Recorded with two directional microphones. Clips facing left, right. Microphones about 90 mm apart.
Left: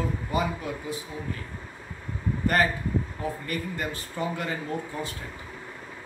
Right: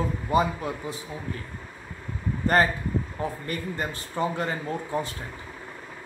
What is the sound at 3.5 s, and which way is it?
Speech, 30° right (ahead or behind).